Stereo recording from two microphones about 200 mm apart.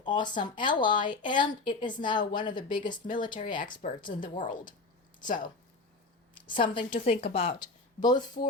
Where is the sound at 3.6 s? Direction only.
35° left (ahead or behind).